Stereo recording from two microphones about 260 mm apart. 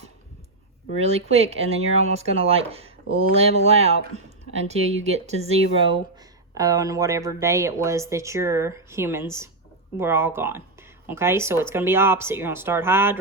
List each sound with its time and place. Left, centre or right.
0.9 s speech: right
6.5 s speech: centre